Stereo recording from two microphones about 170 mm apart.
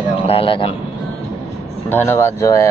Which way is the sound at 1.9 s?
10° left (ahead or behind).